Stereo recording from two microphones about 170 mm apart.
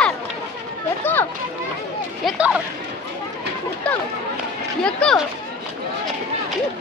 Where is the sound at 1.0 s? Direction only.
10° left (ahead or behind).